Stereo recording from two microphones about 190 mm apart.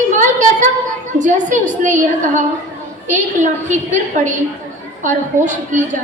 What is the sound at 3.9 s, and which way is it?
A woman's voice, 40° right (ahead or behind).